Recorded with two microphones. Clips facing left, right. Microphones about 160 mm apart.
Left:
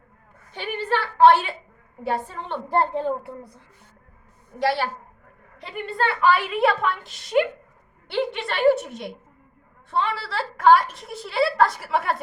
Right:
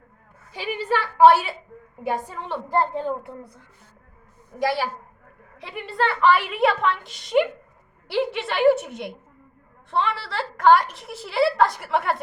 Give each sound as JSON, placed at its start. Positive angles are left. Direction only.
{"t": 0.5, "sound": "a woman's voice", "side_deg": -10}
{"t": 2.6, "sound": "a child's voice", "side_deg": 30}
{"t": 4.6, "sound": "a woman's voice", "side_deg": -10}